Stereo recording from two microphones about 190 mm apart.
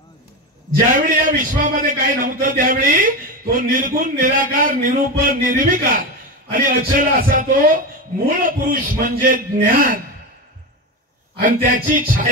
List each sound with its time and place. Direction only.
0.7 s a man's voice: 45° right (ahead or behind)
11.4 s a man's voice: 45° right (ahead or behind)